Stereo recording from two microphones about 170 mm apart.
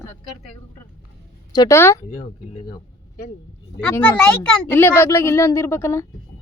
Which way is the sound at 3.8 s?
10° left (ahead or behind).